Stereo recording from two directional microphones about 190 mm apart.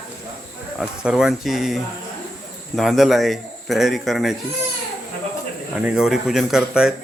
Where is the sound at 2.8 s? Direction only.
Centre (ahead or behind).